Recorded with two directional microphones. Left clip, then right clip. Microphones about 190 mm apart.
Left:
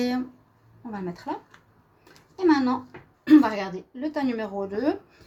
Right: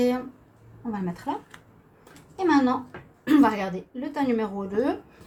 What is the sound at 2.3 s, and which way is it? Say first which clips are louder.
A woman's voice: even; 45° left (ahead or behind).